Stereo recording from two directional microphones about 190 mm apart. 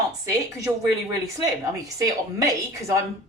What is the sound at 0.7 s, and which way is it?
Speech, 15° right (ahead or behind).